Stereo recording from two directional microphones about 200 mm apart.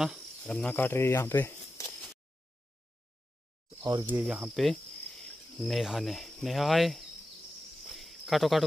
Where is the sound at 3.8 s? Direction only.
20° right (ahead or behind).